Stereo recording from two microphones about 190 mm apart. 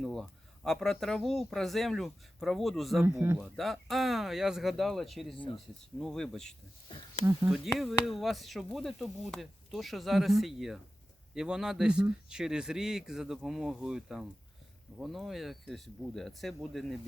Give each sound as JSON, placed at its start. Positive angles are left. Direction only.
{"t": 0.0, "sound": "speech", "side_deg": 0}
{"t": 3.0, "sound": "speech", "side_deg": -10}
{"t": 3.4, "sound": "speech", "side_deg": 0}
{"t": 6.8, "sound": "speech", "side_deg": 25}
{"t": 7.8, "sound": "speech", "side_deg": 0}